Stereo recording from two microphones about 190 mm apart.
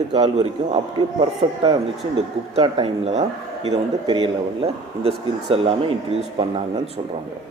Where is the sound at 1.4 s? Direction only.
30° right (ahead or behind).